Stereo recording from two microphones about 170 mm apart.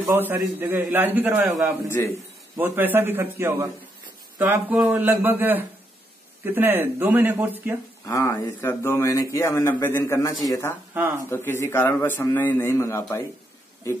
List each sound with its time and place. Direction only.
0.0 s a man's voice: 15° right (ahead or behind)
1.9 s speech: 15° left (ahead or behind)
2.5 s a man's voice: 10° right (ahead or behind)
8.0 s speech: 20° left (ahead or behind)